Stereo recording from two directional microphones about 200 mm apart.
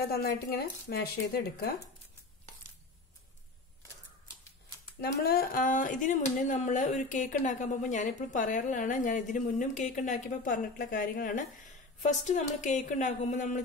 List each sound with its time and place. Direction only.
0.1 s speech: 50° left (ahead or behind)
5.0 s speech: 50° left (ahead or behind)